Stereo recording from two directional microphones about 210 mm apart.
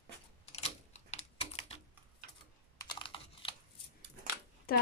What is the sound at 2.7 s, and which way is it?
Computer keyboard, 20° left (ahead or behind).